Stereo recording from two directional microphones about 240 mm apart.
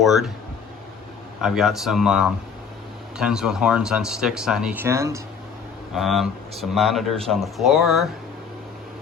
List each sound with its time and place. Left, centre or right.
0.0 s speech: centre
1.4 s speech: centre
5.9 s speech: centre